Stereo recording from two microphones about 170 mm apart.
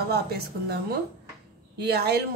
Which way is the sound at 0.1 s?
70° right (ahead or behind).